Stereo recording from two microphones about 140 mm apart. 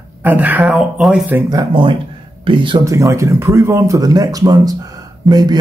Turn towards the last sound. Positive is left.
turn(degrees=-30)  # may be behind; listen again after turning